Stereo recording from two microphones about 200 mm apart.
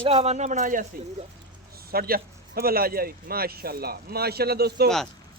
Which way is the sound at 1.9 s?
50° right (ahead or behind).